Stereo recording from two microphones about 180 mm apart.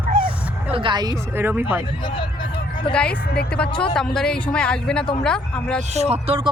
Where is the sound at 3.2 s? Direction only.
60° left (ahead or behind).